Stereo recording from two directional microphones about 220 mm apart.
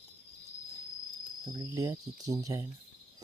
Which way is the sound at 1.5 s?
15° right (ahead or behind).